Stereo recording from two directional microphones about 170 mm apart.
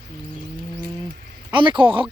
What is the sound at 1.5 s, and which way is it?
Speech, 30° right (ahead or behind).